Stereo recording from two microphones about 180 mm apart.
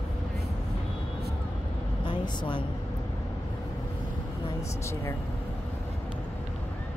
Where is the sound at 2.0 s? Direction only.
25° left (ahead or behind).